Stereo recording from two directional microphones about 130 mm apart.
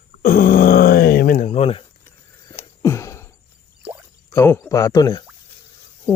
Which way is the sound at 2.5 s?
20° left (ahead or behind).